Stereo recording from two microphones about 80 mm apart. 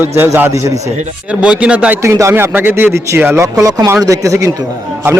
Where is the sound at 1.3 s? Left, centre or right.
Centre.